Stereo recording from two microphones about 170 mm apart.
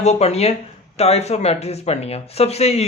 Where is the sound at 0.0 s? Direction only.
40° left (ahead or behind).